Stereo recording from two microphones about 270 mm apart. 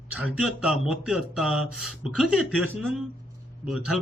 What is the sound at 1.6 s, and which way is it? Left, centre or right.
Speech, left.